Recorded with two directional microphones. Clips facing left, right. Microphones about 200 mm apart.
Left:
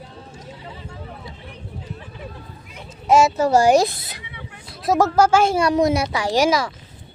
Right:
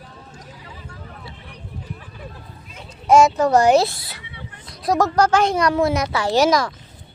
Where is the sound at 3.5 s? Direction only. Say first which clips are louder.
Even; 30° left (ahead or behind).